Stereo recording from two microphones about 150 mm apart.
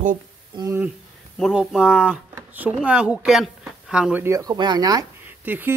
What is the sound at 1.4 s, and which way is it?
Speech, centre (ahead or behind).